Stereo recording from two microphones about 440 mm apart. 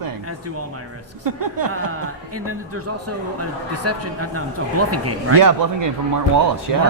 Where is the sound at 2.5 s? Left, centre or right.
Right.